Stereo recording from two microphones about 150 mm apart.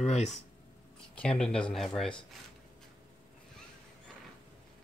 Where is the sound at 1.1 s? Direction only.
5° left (ahead or behind).